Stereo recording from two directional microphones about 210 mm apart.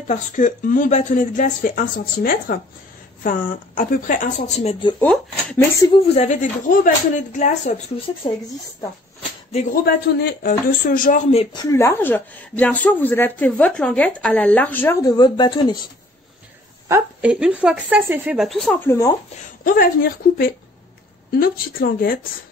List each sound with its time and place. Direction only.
0.1 s speech: 35° left (ahead or behind)
5.0 s speech: 5° left (ahead or behind)
6.1 s speech: 35° left (ahead or behind)
9.5 s speech: 35° left (ahead or behind)
9.8 s speech: 45° left (ahead or behind)
11.5 s speech: 15° left (ahead or behind)
16.8 s a sound: 15° right (ahead or behind)
17.3 s speech: 5° right (ahead or behind)
19.6 s speech: 40° left (ahead or behind)